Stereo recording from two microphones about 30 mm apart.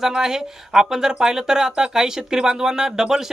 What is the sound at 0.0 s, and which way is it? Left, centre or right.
Speech, centre.